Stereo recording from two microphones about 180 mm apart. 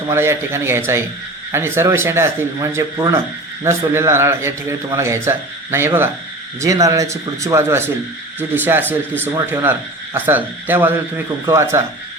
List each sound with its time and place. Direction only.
0.1 s a man's voice: 15° right (ahead or behind)